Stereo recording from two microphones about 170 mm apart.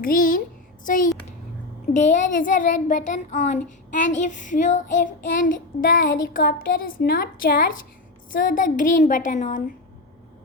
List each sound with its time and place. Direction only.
0.0 s a woman's voice: 55° left (ahead or behind)